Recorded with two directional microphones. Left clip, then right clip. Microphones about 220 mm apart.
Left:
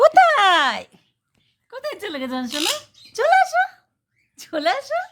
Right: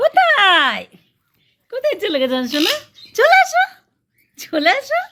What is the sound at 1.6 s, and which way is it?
Speech, 15° left (ahead or behind).